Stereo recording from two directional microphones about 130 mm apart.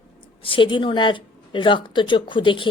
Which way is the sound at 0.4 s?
40° left (ahead or behind).